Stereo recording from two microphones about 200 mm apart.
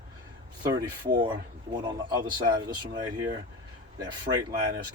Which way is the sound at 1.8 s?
20° right (ahead or behind).